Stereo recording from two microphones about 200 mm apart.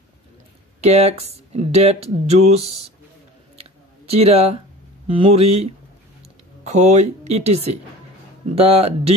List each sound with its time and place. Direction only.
0.7 s speech: 30° right (ahead or behind)
4.1 s speech: 30° right (ahead or behind)